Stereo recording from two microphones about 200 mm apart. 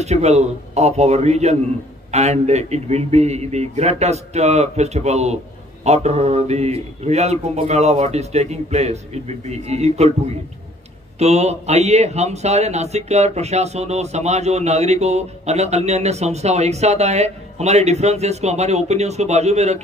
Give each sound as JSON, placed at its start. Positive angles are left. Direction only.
{"t": 0.0, "sound": "a man's voice", "side_deg": -35}
{"t": 11.1, "sound": "a man's voice", "side_deg": -35}